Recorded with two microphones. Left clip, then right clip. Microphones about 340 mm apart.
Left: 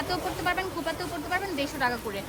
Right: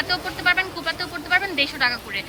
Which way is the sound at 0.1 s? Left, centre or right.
Centre.